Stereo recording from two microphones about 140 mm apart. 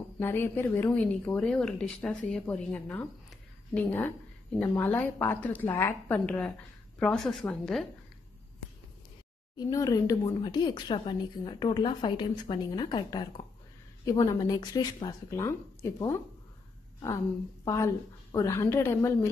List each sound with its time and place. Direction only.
0.2 s speech: 15° left (ahead or behind)
9.6 s speech: 25° left (ahead or behind)
17.6 s speech: 20° left (ahead or behind)